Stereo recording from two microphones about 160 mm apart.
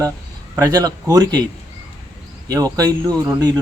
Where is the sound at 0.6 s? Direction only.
20° right (ahead or behind).